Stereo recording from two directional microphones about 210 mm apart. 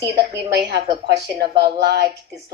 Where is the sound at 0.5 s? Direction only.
50° right (ahead or behind).